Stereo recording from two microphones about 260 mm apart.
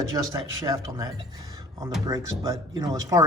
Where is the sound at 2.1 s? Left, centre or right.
Centre.